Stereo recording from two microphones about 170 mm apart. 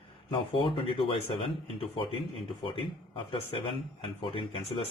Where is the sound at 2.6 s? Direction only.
30° left (ahead or behind).